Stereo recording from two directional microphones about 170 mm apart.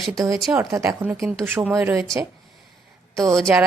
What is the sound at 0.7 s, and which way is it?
Speech, 15° right (ahead or behind).